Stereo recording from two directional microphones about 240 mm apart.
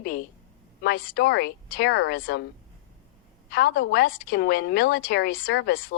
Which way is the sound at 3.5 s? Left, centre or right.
Left.